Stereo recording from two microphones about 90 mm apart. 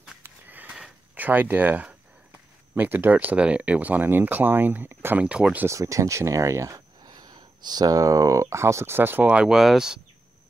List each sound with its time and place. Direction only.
0.2 s a sound: 20° right (ahead or behind)
1.1 s speech: 20° right (ahead or behind)
5.2 s speech: 10° right (ahead or behind)
5.7 s speech: 35° right (ahead or behind); by 9.9 s 5° right (ahead or behind)